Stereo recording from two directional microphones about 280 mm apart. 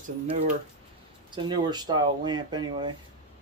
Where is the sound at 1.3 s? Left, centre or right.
Centre.